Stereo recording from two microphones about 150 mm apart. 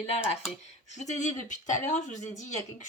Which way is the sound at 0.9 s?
50° left (ahead or behind).